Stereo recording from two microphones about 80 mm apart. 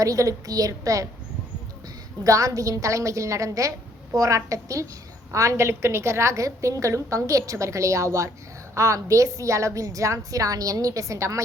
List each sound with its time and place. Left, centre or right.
0.0 s a woman's voice: right
2.2 s a woman's voice: right